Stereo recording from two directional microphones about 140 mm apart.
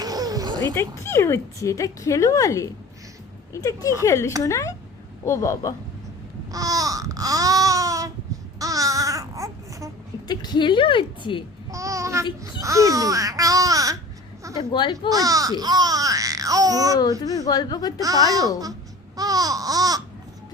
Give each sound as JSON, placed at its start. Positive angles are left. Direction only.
{"t": 0.0, "sound": "a sound", "side_deg": -25}
{"t": 0.7, "sound": "speech", "side_deg": 20}
{"t": 6.5, "sound": "babbling", "side_deg": -25}
{"t": 8.5, "sound": "baby cry", "side_deg": -25}
{"t": 10.2, "sound": "a woman's voice", "side_deg": 30}
{"t": 11.7, "sound": "babbling", "side_deg": -20}
{"t": 14.6, "sound": "a woman's voice", "side_deg": 35}
{"t": 15.1, "sound": "babbling", "side_deg": -25}
{"t": 17.0, "sound": "speech", "side_deg": 30}
{"t": 18.0, "sound": "speech", "side_deg": -25}